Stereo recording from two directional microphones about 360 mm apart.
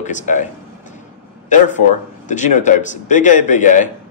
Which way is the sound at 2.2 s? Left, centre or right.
Left.